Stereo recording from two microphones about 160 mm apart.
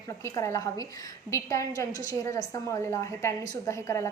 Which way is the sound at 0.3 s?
20° left (ahead or behind).